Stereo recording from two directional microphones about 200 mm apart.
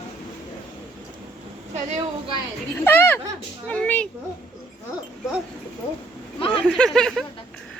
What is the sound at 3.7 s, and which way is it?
Speech, 5° left (ahead or behind).